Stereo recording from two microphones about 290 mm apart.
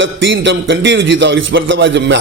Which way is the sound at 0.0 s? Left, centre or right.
Right.